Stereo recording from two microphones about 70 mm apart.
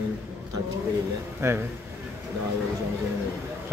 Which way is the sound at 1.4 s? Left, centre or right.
Right.